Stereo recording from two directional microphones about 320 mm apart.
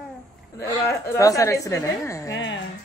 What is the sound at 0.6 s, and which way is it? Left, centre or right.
A woman's voice, centre.